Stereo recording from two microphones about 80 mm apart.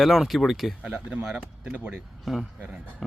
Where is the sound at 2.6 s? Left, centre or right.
Centre.